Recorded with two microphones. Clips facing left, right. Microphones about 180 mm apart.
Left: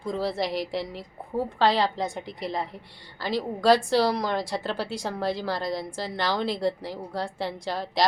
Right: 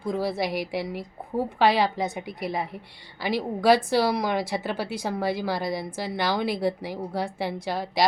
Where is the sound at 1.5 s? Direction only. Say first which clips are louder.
Right 2 dB; 10° right (ahead or behind).